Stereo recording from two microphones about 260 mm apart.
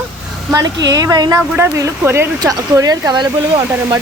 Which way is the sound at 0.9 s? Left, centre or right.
Centre.